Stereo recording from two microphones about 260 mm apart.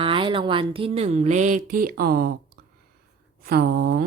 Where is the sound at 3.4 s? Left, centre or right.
Right.